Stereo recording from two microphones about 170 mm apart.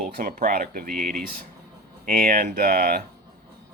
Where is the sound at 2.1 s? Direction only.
60° right (ahead or behind).